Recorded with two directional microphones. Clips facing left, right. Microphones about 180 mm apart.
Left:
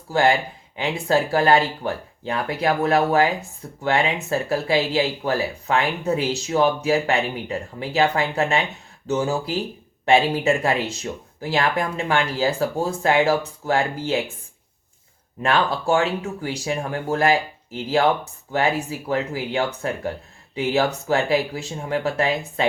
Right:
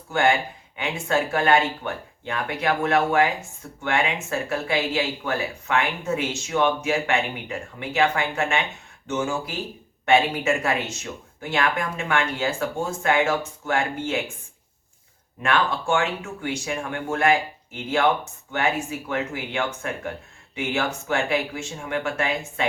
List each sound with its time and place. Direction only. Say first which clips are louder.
0.1 s speech: left 2 dB; 35° left (ahead or behind)
15.4 s speech: left 2 dB; 30° left (ahead or behind)